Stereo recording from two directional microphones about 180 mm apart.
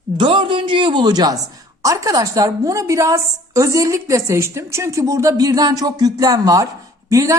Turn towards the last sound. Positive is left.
turn(degrees=-20)  # may be behind; listen again after turning